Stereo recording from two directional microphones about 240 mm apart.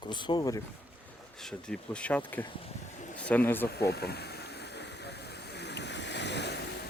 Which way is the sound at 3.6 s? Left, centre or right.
Left.